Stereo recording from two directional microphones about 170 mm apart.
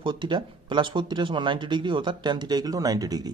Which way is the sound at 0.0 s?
30° right (ahead or behind).